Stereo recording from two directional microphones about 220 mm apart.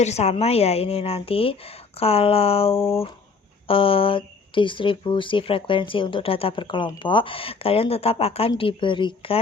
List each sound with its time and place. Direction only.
0.0 s speech: 30° left (ahead or behind)
2.7 s speech: 10° left (ahead or behind)
3.7 s speech: 25° left (ahead or behind)